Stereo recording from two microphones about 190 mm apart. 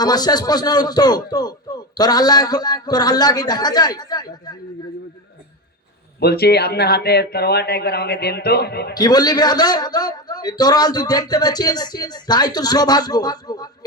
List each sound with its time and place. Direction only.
0.0 s a man's voice: 20° left (ahead or behind)
6.1 s speech: 55° left (ahead or behind)
9.0 s a man's voice: 20° left (ahead or behind)